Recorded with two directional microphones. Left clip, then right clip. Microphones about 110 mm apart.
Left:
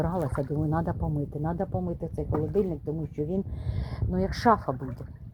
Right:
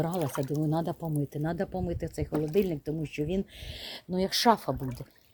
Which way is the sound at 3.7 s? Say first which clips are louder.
Even; 35° right (ahead or behind).